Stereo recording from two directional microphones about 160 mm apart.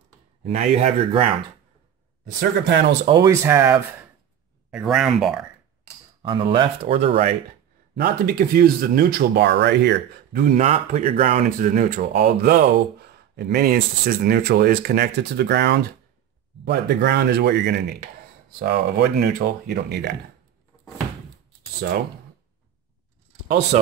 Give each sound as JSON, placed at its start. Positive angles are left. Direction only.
{"t": 0.4, "sound": "speech", "side_deg": -45}
{"t": 3.1, "sound": "speech", "side_deg": -20}
{"t": 6.2, "sound": "speech", "side_deg": -30}
{"t": 7.9, "sound": "speech", "side_deg": -75}
{"t": 18.6, "sound": "speech", "side_deg": -70}
{"t": 23.7, "sound": "speech", "side_deg": -45}